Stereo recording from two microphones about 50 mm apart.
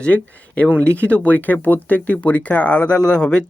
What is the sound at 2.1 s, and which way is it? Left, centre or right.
Speech, left.